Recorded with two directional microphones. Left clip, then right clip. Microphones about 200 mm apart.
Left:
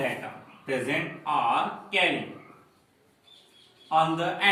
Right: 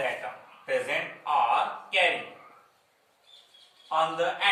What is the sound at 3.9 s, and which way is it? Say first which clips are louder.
Speech: left 2 dB; 15° left (ahead or behind).